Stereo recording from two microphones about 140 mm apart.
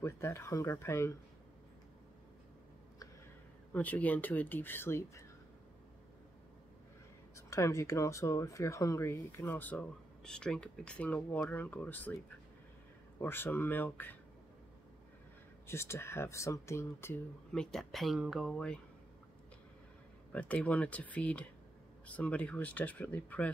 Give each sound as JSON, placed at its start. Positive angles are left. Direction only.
{"t": 0.0, "sound": "speech", "side_deg": 20}
{"t": 3.7, "sound": "speech", "side_deg": 10}
{"t": 7.3, "sound": "speech", "side_deg": 20}
{"t": 13.2, "sound": "speech", "side_deg": 15}
{"t": 15.6, "sound": "speech", "side_deg": 20}
{"t": 17.5, "sound": "speech", "side_deg": 5}
{"t": 20.3, "sound": "speech", "side_deg": 10}